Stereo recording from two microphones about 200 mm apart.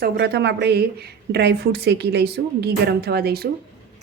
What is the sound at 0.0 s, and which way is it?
Speech, 55° right (ahead or behind).